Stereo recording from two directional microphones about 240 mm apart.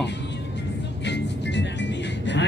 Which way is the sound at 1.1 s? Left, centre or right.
Left.